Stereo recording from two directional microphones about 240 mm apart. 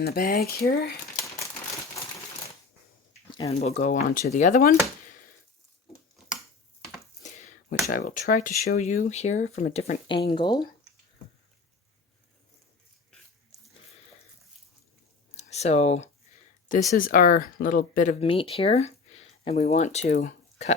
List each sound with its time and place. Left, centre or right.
0.0 s speech: left
3.6 s speech: left
7.2 s a sound: left
7.9 s speech: left; by 10.7 s centre
15.4 s speech: left